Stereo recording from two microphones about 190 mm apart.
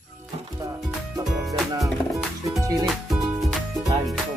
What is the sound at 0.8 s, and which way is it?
Speech, centre (ahead or behind).